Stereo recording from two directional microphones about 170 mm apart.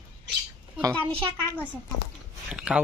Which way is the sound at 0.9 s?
10° left (ahead or behind).